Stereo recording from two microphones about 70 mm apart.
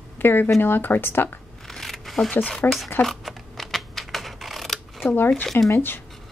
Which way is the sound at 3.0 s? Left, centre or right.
Centre.